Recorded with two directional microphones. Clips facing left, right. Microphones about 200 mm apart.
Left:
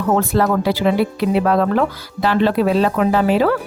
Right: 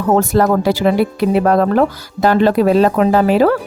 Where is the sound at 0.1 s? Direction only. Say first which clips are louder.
Right 4 dB; 40° right (ahead or behind).